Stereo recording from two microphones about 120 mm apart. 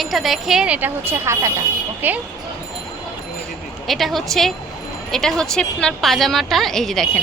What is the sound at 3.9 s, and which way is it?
A woman's voice, centre (ahead or behind).